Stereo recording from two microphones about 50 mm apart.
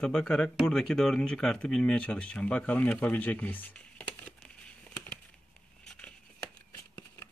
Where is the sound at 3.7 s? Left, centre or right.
Left.